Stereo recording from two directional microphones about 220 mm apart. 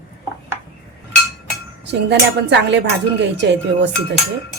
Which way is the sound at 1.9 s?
50° right (ahead or behind).